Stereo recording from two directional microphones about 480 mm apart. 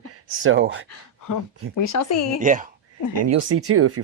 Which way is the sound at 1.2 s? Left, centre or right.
Left.